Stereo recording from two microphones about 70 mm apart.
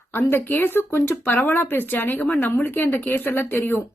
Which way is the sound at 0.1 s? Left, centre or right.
Left.